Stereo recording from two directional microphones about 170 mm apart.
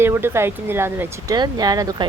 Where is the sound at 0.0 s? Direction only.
15° right (ahead or behind).